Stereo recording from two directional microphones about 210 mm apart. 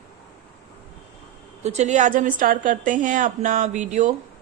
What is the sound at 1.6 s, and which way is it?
Speech, 35° right (ahead or behind).